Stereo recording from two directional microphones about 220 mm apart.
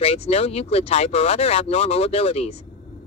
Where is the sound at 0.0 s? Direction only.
25° left (ahead or behind).